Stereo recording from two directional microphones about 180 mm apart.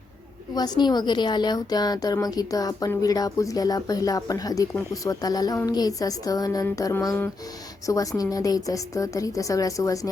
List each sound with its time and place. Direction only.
0.5 s a woman's voice: 20° left (ahead or behind)